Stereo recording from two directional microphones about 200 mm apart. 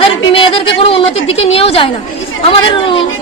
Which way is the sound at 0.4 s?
25° left (ahead or behind).